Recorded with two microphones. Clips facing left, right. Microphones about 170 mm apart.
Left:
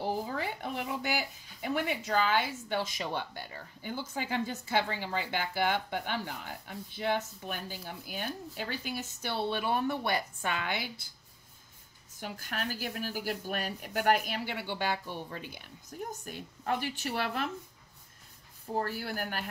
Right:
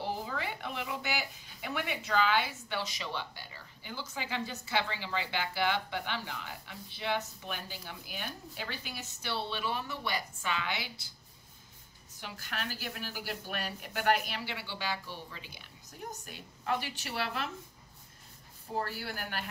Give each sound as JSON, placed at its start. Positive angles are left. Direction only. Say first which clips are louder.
{"t": 0.0, "sound": "a woman's voice", "louder": "left 3 dB", "side_deg": 40}
{"t": 12.2, "sound": "a woman's voice", "louder": "left 3 dB", "side_deg": 45}
{"t": 18.8, "sound": "a woman's voice", "louder": "left 3 dB", "side_deg": 45}